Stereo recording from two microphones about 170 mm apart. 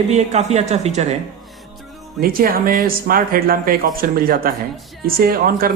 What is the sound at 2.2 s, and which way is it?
Speech, 60° right (ahead or behind).